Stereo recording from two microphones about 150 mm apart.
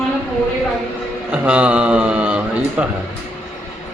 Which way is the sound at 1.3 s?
10° right (ahead or behind).